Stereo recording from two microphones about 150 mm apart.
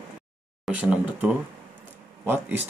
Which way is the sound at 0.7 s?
10° right (ahead or behind).